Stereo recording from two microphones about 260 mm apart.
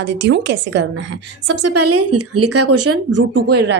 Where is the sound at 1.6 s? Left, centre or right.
Right.